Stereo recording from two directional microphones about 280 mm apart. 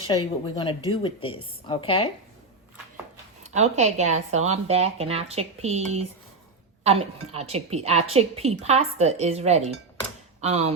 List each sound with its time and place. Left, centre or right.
0.1 s speech: centre
3.4 s speech: right
7.3 s speech: right